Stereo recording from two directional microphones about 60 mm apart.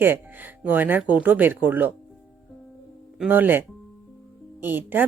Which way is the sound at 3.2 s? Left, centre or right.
Right.